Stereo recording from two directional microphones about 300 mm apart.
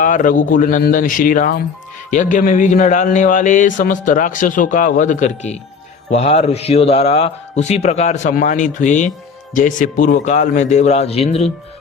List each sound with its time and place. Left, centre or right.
0.0 s speech: left